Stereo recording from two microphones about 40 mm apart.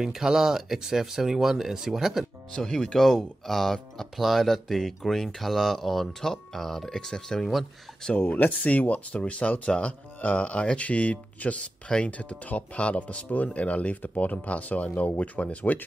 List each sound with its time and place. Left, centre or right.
0.0 s speech: centre
2.5 s speech: centre
3.0 s speech: centre
8.3 s speech: left
9.2 s speech: left